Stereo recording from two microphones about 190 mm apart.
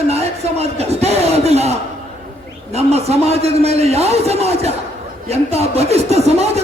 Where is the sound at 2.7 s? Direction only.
35° right (ahead or behind).